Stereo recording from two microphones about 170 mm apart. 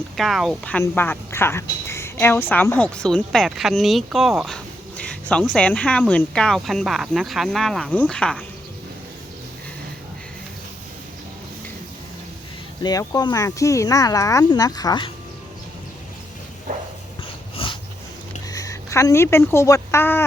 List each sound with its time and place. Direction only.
0.2 s speech: centre (ahead or behind)
12.8 s speech: 20° left (ahead or behind)
16.7 s a sound: 50° right (ahead or behind)
17.6 s dog: 35° left (ahead or behind)
18.4 s a woman's voice: 20° left (ahead or behind)